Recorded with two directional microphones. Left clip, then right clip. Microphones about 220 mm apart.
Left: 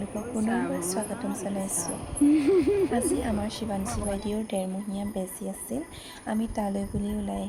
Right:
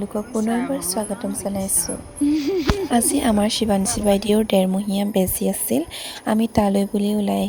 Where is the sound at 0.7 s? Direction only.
25° right (ahead or behind).